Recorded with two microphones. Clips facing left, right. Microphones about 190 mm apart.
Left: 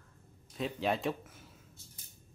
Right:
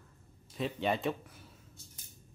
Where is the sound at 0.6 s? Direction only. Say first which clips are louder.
Even; centre (ahead or behind).